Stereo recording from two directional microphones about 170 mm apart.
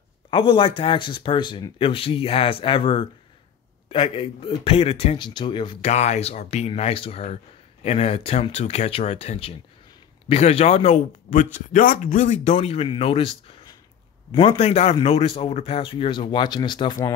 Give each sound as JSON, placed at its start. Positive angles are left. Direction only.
{"t": 0.3, "sound": "speech", "side_deg": 30}
{"t": 5.9, "sound": "speech", "side_deg": 40}
{"t": 11.5, "sound": "speech", "side_deg": 55}